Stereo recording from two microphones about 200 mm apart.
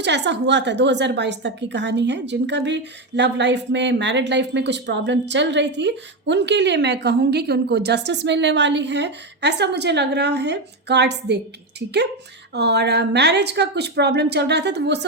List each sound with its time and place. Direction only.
0.0 s a woman's voice: 60° right (ahead or behind)
12.5 s a woman's voice: 55° right (ahead or behind)